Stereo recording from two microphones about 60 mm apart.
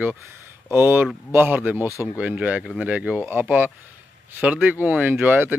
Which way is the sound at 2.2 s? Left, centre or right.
Right.